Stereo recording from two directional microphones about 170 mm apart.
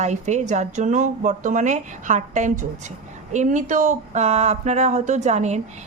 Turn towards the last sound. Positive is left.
turn(degrees=-40)  # may be behind; listen again after turning